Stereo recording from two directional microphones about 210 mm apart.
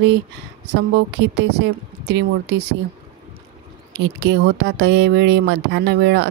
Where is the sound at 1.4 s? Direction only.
50° right (ahead or behind).